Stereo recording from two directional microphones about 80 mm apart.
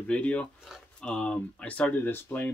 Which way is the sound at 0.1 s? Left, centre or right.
Centre.